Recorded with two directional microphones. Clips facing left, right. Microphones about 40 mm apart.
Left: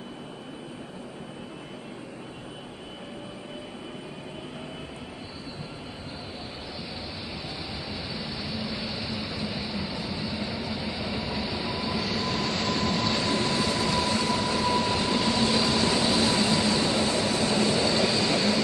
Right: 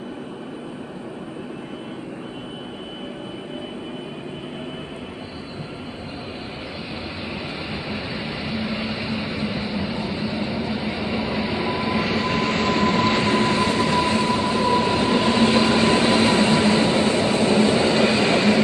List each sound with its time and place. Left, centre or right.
7.9 s vehicle: right